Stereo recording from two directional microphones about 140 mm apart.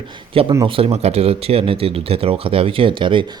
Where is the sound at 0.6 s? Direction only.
40° right (ahead or behind).